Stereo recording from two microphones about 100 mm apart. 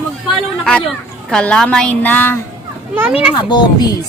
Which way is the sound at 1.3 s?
10° left (ahead or behind).